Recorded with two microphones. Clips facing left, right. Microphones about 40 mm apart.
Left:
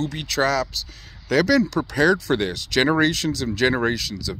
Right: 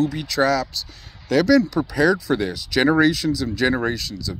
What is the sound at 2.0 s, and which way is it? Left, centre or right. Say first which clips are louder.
Speech: even; left.